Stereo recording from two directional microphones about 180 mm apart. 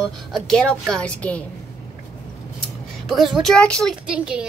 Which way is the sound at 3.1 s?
Centre (ahead or behind).